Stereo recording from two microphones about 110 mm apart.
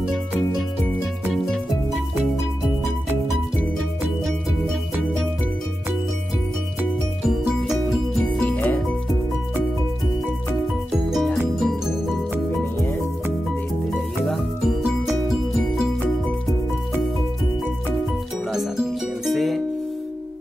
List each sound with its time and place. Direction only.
0.0 s music: centre (ahead or behind)
7.2 s music: centre (ahead or behind)
8.2 s music: 15° left (ahead or behind)
11.1 s music: centre (ahead or behind)
13.9 s music: centre (ahead or behind)
18.5 s music: 5° right (ahead or behind)